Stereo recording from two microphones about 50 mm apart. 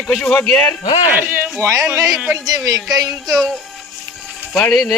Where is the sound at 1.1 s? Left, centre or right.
Right.